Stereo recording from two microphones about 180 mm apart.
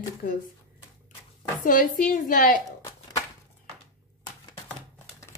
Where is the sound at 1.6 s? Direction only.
50° left (ahead or behind).